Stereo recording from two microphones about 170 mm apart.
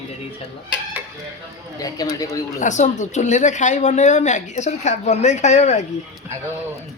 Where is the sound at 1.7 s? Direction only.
20° left (ahead or behind).